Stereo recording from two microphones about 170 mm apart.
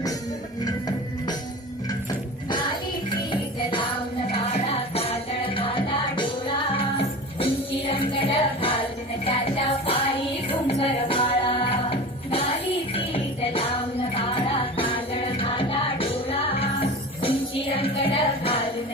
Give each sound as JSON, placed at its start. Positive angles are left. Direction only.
{"t": 0.6, "sound": "music", "side_deg": 20}
{"t": 4.3, "sound": "music", "side_deg": 35}